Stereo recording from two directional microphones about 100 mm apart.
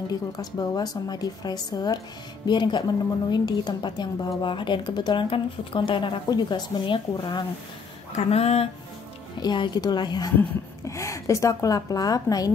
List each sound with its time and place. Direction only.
0.4 s a woman's voice: 40° left (ahead or behind)
8.2 s speech: 90° left
9.4 s a woman's voice: 45° left (ahead or behind)
10.9 s a woman's voice: 30° left (ahead or behind)